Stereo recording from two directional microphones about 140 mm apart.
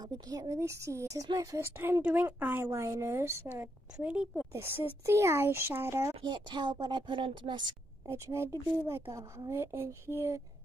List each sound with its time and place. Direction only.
0.3 s a woman's voice: 25° right (ahead or behind); by 4.5 s 5° right (ahead or behind)
4.5 s a woman's voice: 20° right (ahead or behind)
6.2 s speech: 35° right (ahead or behind)
8.1 s a woman's voice: 20° right (ahead or behind)